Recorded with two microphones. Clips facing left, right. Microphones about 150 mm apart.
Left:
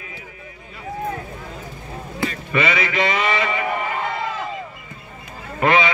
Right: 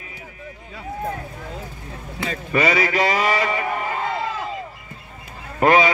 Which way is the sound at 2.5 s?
40° right (ahead or behind).